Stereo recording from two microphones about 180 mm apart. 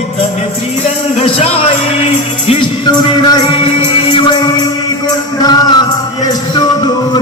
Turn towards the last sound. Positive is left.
turn(degrees=25)  # may be behind; listen again after turning